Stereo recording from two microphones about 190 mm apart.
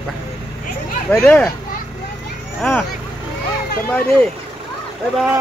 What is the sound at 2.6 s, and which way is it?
Speech, centre (ahead or behind).